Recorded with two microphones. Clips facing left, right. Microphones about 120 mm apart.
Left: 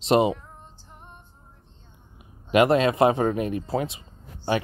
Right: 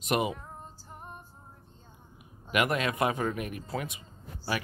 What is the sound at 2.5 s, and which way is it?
Speech, 30° left (ahead or behind).